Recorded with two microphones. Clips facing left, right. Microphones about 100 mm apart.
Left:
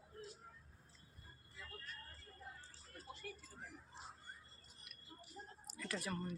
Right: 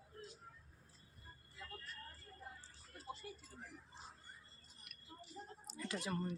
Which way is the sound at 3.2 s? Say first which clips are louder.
Left 1 dB; 15° right (ahead or behind).